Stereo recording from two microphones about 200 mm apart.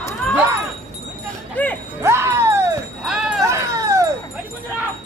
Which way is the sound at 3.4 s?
15° right (ahead or behind).